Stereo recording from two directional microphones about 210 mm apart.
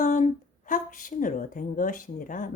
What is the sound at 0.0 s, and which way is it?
A woman's voice, 35° left (ahead or behind).